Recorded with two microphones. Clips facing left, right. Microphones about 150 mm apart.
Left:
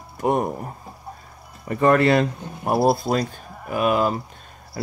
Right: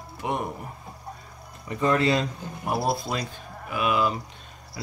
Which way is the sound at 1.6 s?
60° left (ahead or behind).